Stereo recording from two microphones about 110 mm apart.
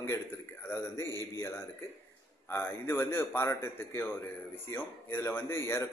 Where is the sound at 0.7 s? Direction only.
25° left (ahead or behind).